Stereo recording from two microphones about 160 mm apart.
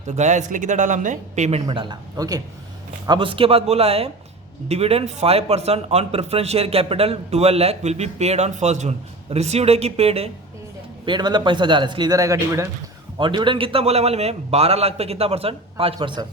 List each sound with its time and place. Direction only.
0.2 s speech: 50° right (ahead or behind)
1.6 s a man's voice: 30° right (ahead or behind)
11.0 s a man's voice: 30° right (ahead or behind)
13.1 s a man's voice: 30° right (ahead or behind)